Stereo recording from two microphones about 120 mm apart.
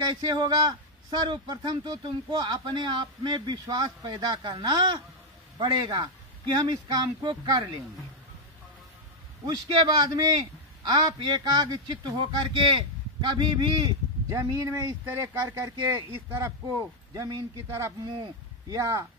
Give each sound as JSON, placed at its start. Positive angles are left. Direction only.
{"t": 0.3, "sound": "speech", "side_deg": -35}
{"t": 9.5, "sound": "speech", "side_deg": -35}